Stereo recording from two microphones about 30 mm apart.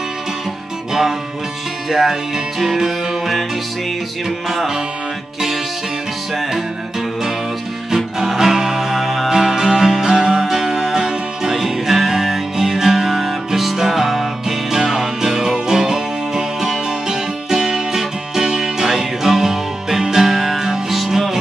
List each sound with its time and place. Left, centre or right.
1.9 s music: centre
7.9 s music: centre